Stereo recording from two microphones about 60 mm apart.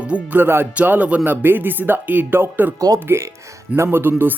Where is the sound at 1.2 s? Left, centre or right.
Right.